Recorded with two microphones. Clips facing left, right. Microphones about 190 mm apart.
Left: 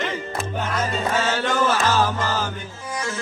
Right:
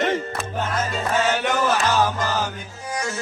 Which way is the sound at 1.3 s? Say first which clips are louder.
Even; 15° right (ahead or behind).